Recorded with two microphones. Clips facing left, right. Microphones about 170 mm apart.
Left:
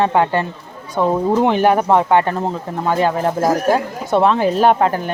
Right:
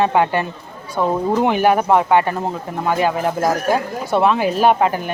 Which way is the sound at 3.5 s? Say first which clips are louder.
Left 2 dB; 20° left (ahead or behind).